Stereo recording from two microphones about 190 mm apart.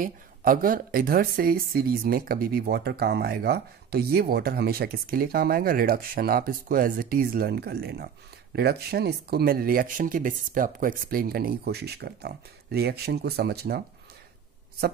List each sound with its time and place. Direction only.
0.0 s speech: 50° right (ahead or behind)